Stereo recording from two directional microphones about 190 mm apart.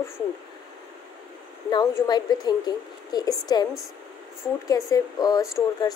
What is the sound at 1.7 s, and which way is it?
Speech, 20° left (ahead or behind).